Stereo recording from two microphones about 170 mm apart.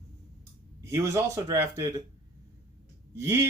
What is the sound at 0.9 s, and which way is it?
Speech, 20° right (ahead or behind).